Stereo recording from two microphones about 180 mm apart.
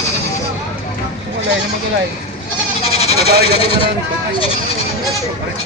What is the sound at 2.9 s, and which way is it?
Speech, 35° left (ahead or behind).